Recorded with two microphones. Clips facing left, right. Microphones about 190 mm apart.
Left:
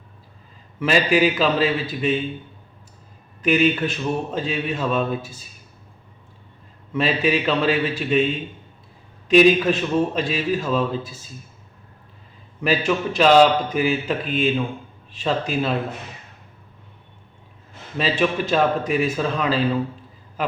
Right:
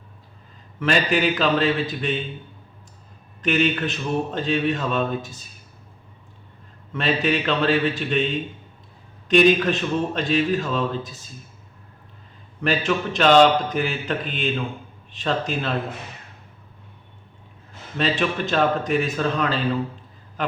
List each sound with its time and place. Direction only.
0.8 s a man's voice: 5° left (ahead or behind)
3.4 s a sound: 5° left (ahead or behind)
6.9 s a man's voice: 5° left (ahead or behind)
9.3 s a man's voice: 5° left (ahead or behind)
12.6 s a man's voice: 5° left (ahead or behind)
15.1 s a sound: 5° left (ahead or behind)
17.9 s a man's voice: 5° left (ahead or behind)